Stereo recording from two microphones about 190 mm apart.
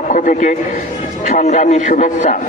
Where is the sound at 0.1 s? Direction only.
45° left (ahead or behind).